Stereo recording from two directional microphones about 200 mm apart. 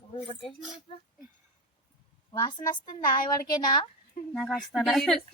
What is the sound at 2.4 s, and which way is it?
A woman's voice, 20° left (ahead or behind).